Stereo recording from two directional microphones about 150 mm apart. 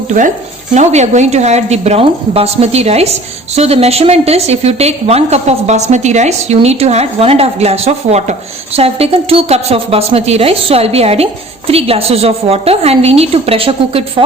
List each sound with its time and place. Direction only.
0.7 s a woman's voice: 50° right (ahead or behind)